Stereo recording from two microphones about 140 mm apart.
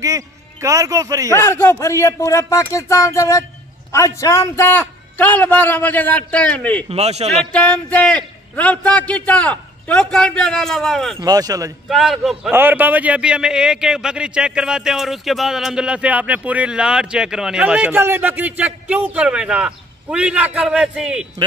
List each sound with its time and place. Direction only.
0.0 s a man's voice: 25° right (ahead or behind)
1.3 s a man's voice: 15° left (ahead or behind)
6.9 s a man's voice: 50° right (ahead or behind)
7.5 s a man's voice: 10° left (ahead or behind)
11.1 s speech: 25° right (ahead or behind)
11.9 s a man's voice: centre (ahead or behind)
12.4 s a man's voice: 15° right (ahead or behind)